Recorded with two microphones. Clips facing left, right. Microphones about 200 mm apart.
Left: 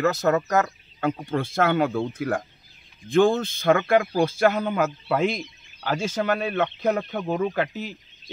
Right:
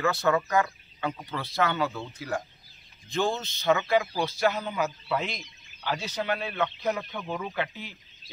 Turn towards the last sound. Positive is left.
turn(degrees=45)  # may be behind; listen again after turning